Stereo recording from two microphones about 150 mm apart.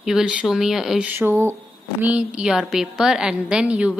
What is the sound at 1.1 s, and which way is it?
A woman's voice, 15° right (ahead or behind).